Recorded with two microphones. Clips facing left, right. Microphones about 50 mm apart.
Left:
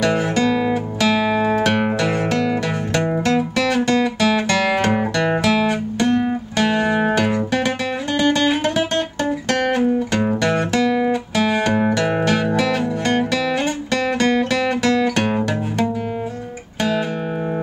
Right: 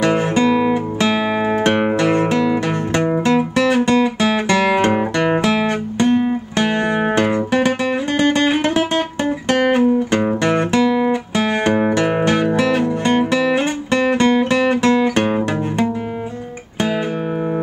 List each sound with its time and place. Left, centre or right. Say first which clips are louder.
0.0 s music: right 2 dB; right
5.9 s guitar: right 3 dB; right
6.5 s music: left 2 dB; right